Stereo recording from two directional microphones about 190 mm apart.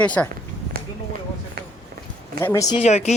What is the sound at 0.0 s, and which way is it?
Speech, 5° left (ahead or behind).